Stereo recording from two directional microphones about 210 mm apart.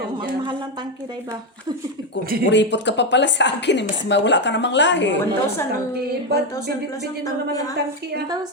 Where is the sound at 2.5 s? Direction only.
55° left (ahead or behind).